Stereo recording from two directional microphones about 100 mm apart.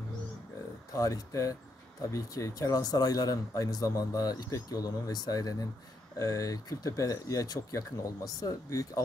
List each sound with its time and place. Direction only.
0.9 s speech: 35° left (ahead or behind)